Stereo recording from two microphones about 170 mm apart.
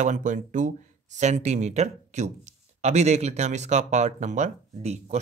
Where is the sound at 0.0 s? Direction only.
45° right (ahead or behind).